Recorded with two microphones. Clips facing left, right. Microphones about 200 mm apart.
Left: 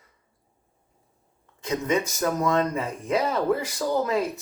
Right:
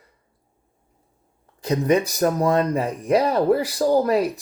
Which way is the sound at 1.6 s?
35° right (ahead or behind).